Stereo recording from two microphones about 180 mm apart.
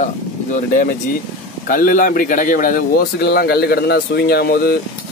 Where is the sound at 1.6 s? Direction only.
50° left (ahead or behind).